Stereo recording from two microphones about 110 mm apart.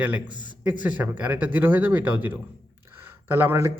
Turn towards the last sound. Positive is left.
turn(degrees=-20)  # may be behind; listen again after turning